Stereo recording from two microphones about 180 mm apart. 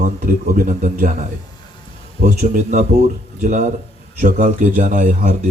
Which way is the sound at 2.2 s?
45° right (ahead or behind).